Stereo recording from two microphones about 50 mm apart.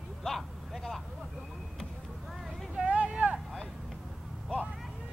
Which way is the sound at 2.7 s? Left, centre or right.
Right.